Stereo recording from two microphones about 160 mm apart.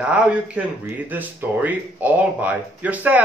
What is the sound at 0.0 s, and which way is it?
Speech, 5° right (ahead or behind).